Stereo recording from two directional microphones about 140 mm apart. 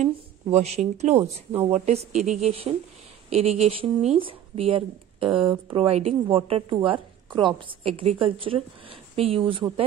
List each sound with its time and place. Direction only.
0.0 s speech: 50° right (ahead or behind)
1.2 s speech: 15° right (ahead or behind)
1.7 s speech: 50° right (ahead or behind)